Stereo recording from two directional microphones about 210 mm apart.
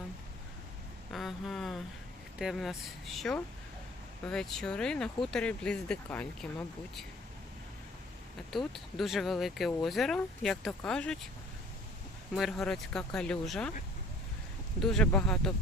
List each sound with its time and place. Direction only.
1.1 s a sound: centre (ahead or behind)
2.4 s speech: centre (ahead or behind)
8.4 s speech: centre (ahead or behind)
12.3 s speech: centre (ahead or behind)
14.8 s speech: 5° left (ahead or behind)